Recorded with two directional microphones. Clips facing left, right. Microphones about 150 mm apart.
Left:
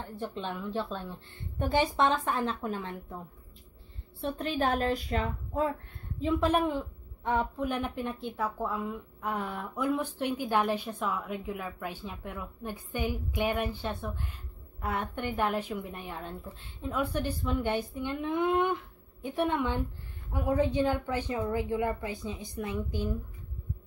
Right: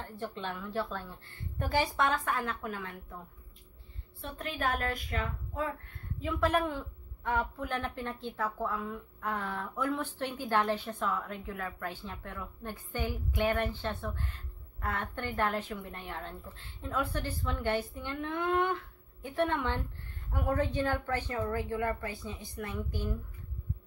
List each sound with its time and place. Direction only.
0.0 s a woman's voice: 15° left (ahead or behind)
4.2 s a woman's voice: 30° left (ahead or behind)
6.2 s a woman's voice: 20° left (ahead or behind)